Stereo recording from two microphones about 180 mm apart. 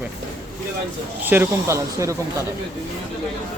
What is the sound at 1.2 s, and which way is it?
Speech, 10° right (ahead or behind).